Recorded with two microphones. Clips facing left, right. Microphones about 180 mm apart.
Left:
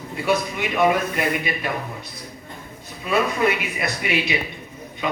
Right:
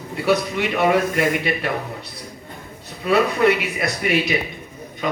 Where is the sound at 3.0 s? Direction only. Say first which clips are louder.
Right 4 dB; 65° right (ahead or behind).